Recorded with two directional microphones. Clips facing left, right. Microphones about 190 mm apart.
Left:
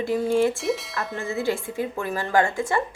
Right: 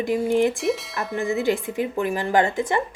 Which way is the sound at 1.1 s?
15° right (ahead or behind).